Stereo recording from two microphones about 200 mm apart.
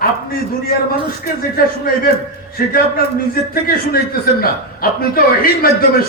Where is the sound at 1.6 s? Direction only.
50° left (ahead or behind).